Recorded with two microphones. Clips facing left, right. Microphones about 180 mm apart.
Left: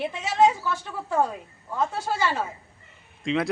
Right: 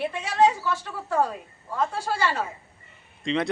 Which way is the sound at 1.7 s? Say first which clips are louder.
Even; 5° left (ahead or behind).